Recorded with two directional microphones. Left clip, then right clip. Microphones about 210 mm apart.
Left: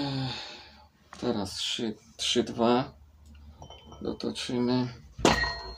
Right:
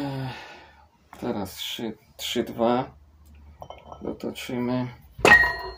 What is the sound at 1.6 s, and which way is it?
Speech, 40° right (ahead or behind).